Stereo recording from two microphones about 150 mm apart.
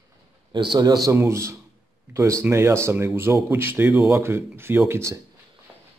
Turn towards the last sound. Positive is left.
turn(degrees=-20)  # may be behind; listen again after turning